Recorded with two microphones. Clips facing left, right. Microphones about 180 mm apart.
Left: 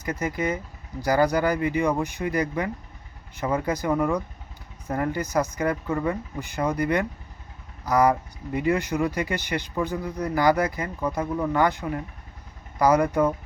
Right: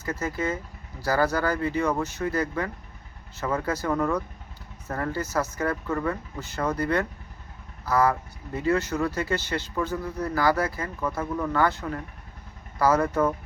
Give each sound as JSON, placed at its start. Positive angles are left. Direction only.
{"t": 0.0, "sound": "speech", "side_deg": 15}